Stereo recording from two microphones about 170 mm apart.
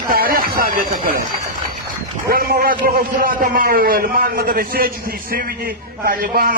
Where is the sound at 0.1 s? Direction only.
60° right (ahead or behind).